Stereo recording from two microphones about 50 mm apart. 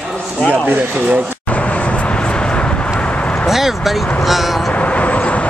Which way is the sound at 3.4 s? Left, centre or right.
Centre.